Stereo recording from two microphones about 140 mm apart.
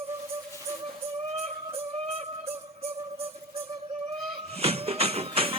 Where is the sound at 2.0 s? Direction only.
45° right (ahead or behind).